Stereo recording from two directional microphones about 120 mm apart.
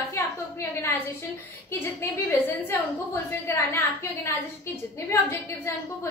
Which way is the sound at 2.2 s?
15° left (ahead or behind).